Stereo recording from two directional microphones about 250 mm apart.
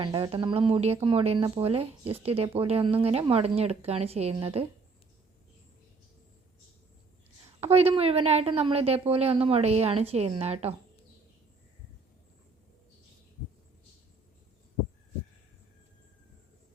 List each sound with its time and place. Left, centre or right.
0.0 s speech: centre
7.6 s speech: right